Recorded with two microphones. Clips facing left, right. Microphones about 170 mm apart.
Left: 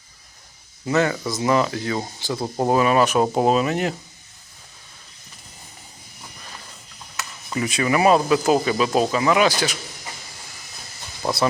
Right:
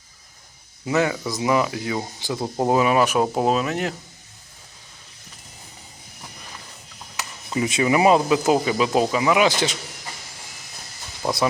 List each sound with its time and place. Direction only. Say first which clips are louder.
0.9 s speech: left 1 dB; 10° right (ahead or behind)
3.3 s speech: left 2 dB; centre (ahead or behind)
7.2 s speech: right 1 dB; 20° right (ahead or behind)
11.2 s speech: even; 10° right (ahead or behind)